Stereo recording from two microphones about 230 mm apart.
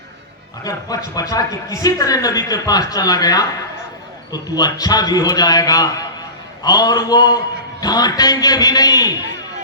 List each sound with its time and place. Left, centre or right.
1.1 s a man's voice: centre